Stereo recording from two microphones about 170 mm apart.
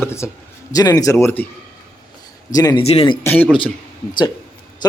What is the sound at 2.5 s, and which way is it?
Speech, 20° left (ahead or behind).